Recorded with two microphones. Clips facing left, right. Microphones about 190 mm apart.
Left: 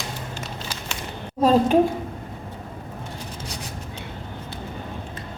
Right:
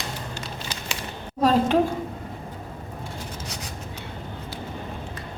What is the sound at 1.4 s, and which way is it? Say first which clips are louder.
Speech: left 3 dB; 15° left (ahead or behind).